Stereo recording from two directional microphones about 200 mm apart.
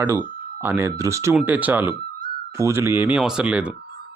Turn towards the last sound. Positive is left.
turn(degrees=-5)  # may be behind; listen again after turning